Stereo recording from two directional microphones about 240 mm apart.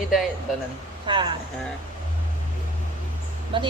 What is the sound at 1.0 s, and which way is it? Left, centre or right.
Speech, centre.